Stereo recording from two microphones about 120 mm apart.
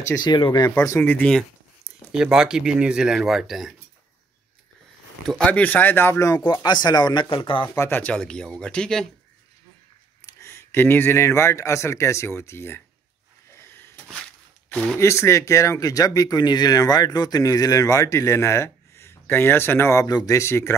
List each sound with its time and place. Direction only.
0.2 s speech: 40° left (ahead or behind)
0.8 s speech: 25° left (ahead or behind)
1.1 s speech: 10° left (ahead or behind)
2.1 s speech: 5° right (ahead or behind)
5.4 s speech: 15° left (ahead or behind)
6.5 s speech: 35° left (ahead or behind)
7.6 s speech: 20° left (ahead or behind)
8.0 s speech: 5° left (ahead or behind)
10.2 s speech: 25° left (ahead or behind)
13.5 s a sound: 20° left (ahead or behind)
15.0 s speech: 25° left (ahead or behind)